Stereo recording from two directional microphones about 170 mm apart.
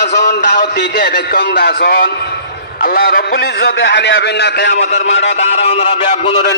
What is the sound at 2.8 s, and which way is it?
A man's voice, 60° left (ahead or behind).